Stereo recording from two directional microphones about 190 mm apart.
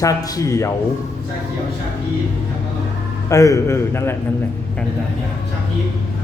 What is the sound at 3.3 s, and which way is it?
Speech, 15° left (ahead or behind).